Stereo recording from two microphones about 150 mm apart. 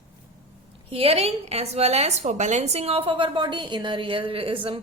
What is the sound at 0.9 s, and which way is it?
A woman's voice, 40° right (ahead or behind).